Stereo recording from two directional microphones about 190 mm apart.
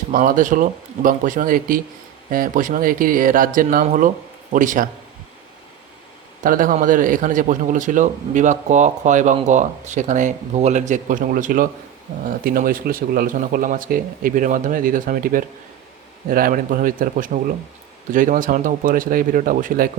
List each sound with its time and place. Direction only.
0.1 s speech: 45° right (ahead or behind)
6.4 s a man's voice: 45° right (ahead or behind)